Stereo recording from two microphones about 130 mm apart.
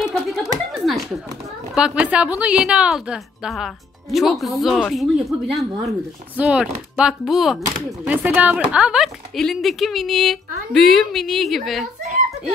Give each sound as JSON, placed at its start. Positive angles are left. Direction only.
{"t": 0.0, "sound": "a sound", "side_deg": 0}
{"t": 1.8, "sound": "a woman's voice", "side_deg": -10}
{"t": 8.0, "sound": "a woman's voice", "side_deg": -10}